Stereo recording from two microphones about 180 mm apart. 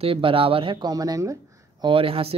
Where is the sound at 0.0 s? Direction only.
30° right (ahead or behind).